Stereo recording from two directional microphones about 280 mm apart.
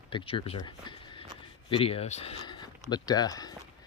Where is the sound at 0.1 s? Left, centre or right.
Centre.